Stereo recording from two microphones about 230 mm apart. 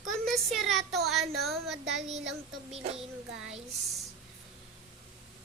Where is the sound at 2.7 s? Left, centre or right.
Right.